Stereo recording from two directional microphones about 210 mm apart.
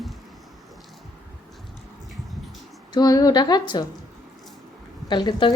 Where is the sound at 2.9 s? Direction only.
15° left (ahead or behind).